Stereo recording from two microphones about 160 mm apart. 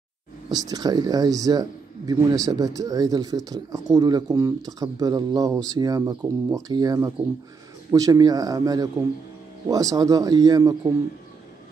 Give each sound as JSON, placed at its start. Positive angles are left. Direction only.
{"t": 0.5, "sound": "speech", "side_deg": -25}